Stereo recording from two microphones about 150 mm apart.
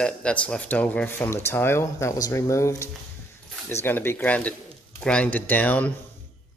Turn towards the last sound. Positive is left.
turn(degrees=10)  # may be behind; listen again after turning